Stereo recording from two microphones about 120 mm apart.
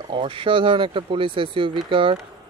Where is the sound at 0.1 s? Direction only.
45° right (ahead or behind).